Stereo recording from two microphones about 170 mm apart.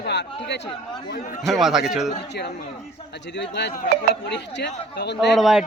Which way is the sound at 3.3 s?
90° left.